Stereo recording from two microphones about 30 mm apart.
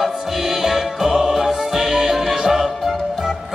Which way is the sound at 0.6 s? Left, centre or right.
Centre.